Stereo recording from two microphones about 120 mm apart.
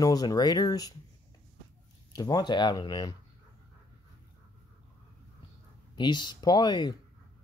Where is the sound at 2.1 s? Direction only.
30° left (ahead or behind).